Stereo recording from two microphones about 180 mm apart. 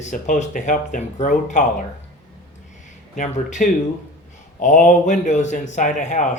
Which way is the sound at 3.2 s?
45° left (ahead or behind).